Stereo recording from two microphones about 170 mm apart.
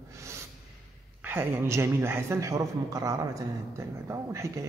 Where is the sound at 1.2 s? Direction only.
15° right (ahead or behind).